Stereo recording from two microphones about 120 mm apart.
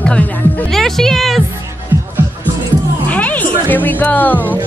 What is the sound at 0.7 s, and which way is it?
Speech, 5° left (ahead or behind).